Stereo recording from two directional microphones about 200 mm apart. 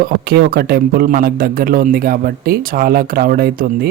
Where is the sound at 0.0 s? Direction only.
50° right (ahead or behind).